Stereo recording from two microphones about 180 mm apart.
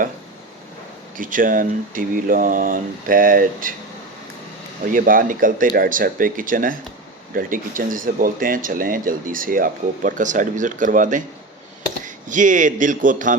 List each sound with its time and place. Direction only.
1.1 s speech: 50° right (ahead or behind)
4.9 s speech: 50° right (ahead or behind)